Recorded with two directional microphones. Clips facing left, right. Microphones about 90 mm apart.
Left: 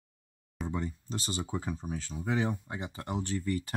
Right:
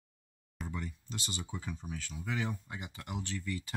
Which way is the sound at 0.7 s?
30° left (ahead or behind).